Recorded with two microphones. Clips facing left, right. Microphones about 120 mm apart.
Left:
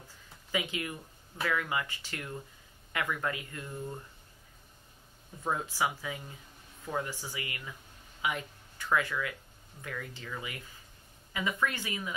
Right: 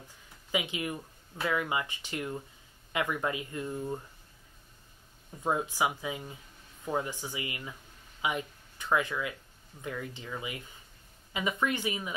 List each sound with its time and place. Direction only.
0.5 s speech: 20° right (ahead or behind)
5.4 s speech: 20° right (ahead or behind)